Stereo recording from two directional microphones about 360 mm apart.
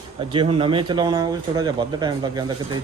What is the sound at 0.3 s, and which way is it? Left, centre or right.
Speech, centre.